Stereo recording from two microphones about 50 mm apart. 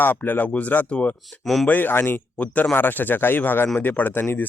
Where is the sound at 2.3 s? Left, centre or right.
Left.